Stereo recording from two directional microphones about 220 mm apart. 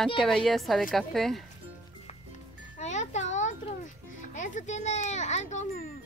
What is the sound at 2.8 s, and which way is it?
Music, 30° left (ahead or behind).